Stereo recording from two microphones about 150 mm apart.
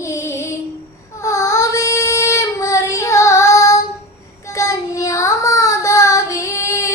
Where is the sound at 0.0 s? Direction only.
20° left (ahead or behind).